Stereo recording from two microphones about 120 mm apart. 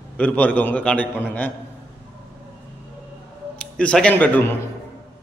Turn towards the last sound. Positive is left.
turn(degrees=15)  # may be behind; listen again after turning